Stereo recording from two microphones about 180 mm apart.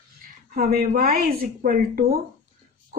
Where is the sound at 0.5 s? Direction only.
55° right (ahead or behind).